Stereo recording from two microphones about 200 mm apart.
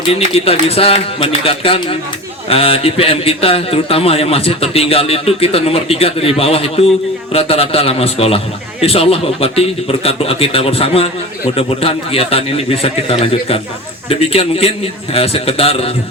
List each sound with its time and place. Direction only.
0.3 s a man's voice: 30° left (ahead or behind)